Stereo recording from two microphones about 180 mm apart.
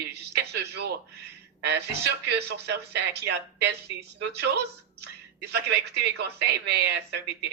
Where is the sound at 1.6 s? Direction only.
70° right (ahead or behind).